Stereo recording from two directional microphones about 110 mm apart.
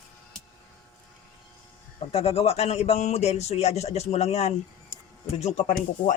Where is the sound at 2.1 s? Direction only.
65° left (ahead or behind).